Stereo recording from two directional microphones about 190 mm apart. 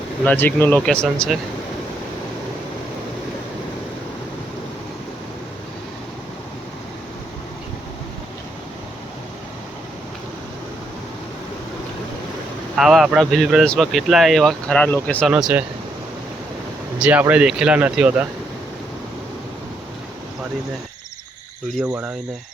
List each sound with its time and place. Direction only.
0.3 s speech: 10° left (ahead or behind)
12.7 s speech: centre (ahead or behind)
15.3 s speech: 5° right (ahead or behind)
17.0 s speech: 10° right (ahead or behind)
21.8 s speech: 5° right (ahead or behind)